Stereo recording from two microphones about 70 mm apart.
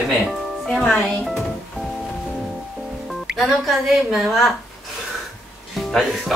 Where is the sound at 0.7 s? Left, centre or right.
Centre.